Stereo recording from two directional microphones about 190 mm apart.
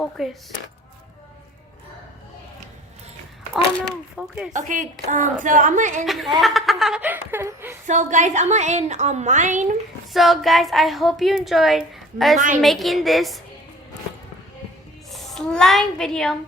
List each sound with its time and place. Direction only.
0.0 s speech: centre (ahead or behind)
3.5 s speech: centre (ahead or behind)
4.5 s a woman's voice: 40° right (ahead or behind)
6.1 s speech: centre (ahead or behind)
7.9 s a woman's voice: 40° right (ahead or behind)
10.1 s speech: centre (ahead or behind)
15.1 s a child's voice: centre (ahead or behind)